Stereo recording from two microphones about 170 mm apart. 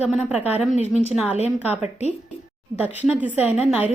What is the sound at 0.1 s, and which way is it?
Speech, 5° right (ahead or behind).